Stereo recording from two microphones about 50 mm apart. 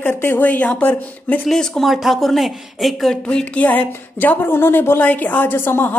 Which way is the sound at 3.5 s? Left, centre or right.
Left.